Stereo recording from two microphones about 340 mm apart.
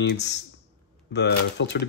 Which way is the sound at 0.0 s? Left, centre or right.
Left.